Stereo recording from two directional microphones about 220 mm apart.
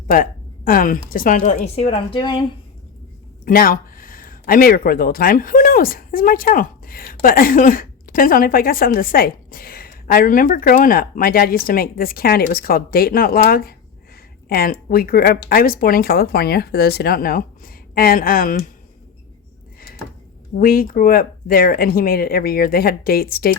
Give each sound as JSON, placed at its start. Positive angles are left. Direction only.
{"t": 0.1, "sound": "speech", "side_deg": 40}
{"t": 3.4, "sound": "speech", "side_deg": 40}
{"t": 20.6, "sound": "speech", "side_deg": 40}